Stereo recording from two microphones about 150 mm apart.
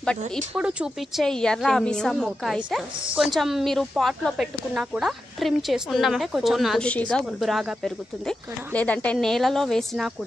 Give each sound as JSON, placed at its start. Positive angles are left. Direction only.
{"t": 0.6, "sound": "speech", "side_deg": -5}